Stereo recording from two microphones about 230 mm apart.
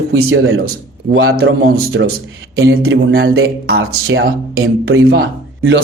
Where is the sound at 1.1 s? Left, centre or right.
Right.